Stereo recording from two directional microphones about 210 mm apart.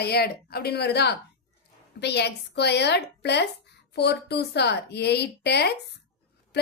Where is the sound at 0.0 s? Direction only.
50° left (ahead or behind).